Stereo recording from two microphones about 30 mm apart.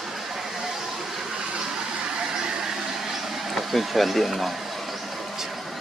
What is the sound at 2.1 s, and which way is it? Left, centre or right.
Vehicle, centre.